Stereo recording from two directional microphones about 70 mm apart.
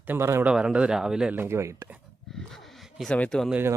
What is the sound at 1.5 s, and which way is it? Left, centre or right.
Speech, right.